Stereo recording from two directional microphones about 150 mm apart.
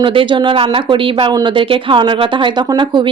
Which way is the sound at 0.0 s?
35° right (ahead or behind).